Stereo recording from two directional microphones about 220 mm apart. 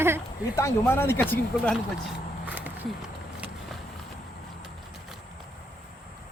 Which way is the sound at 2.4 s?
5° right (ahead or behind).